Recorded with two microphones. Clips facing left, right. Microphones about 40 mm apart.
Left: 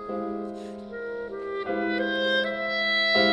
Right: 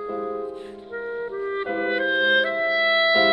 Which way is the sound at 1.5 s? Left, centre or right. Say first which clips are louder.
Right 2 dB; right.